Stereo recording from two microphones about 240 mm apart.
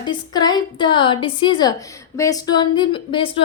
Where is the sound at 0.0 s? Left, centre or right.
Centre.